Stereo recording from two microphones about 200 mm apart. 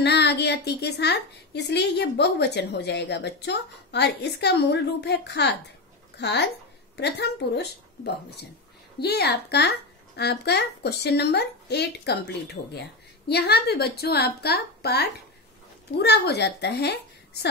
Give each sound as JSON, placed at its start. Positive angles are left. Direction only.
{"t": 0.0, "sound": "a woman's voice", "side_deg": 55}